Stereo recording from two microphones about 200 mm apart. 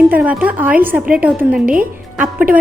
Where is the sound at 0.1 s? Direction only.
10° right (ahead or behind).